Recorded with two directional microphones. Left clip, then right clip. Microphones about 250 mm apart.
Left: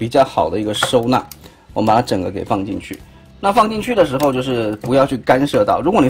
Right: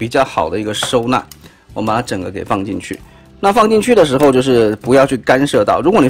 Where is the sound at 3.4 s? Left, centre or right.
Right.